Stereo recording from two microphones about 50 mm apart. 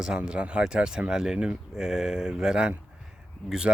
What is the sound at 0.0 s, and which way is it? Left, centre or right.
Speech, centre.